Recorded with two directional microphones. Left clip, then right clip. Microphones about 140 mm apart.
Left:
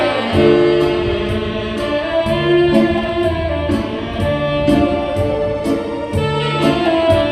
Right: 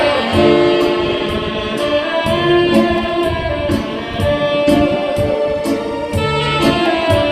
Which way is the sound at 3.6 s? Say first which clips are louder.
Right 1 dB; 45° right (ahead or behind).